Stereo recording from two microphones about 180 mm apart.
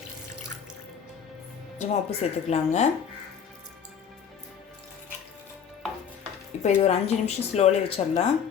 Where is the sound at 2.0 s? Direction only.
35° left (ahead or behind).